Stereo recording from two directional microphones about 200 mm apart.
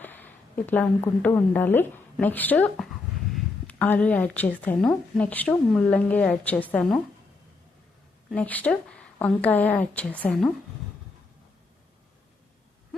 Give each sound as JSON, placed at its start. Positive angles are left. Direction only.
{"t": 0.0, "sound": "a woman's voice", "side_deg": 10}
{"t": 8.3, "sound": "a woman's voice", "side_deg": 5}